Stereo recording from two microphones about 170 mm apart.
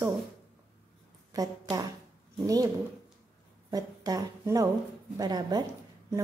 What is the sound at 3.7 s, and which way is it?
A woman's voice, 25° right (ahead or behind).